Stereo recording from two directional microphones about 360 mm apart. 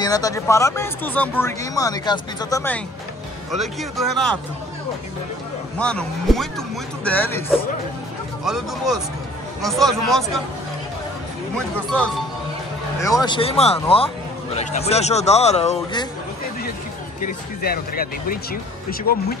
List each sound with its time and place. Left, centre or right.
0.0 s speech: centre
5.8 s speech: centre
13.0 s speech: centre
17.2 s speech: left